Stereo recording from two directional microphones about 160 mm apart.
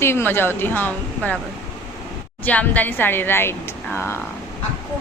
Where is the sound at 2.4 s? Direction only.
10° left (ahead or behind).